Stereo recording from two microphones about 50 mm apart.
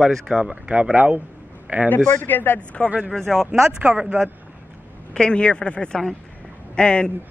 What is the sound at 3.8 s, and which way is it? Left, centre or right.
Speech, right.